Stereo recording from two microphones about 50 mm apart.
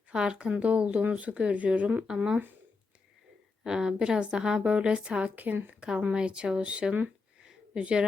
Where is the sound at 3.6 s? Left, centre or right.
Centre; by 5.6 s right.